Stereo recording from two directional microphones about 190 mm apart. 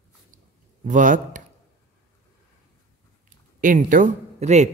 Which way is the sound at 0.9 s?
45° right (ahead or behind).